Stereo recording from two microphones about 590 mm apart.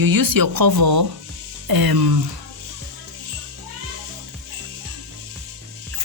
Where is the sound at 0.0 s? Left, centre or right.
Right.